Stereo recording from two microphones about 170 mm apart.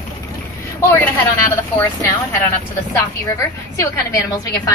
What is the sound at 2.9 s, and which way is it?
A woman's voice, 20° left (ahead or behind).